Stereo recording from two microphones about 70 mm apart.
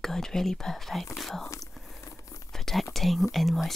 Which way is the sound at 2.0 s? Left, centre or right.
Left.